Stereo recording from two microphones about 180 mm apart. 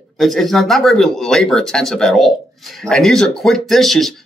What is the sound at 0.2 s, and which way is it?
Speech, centre (ahead or behind).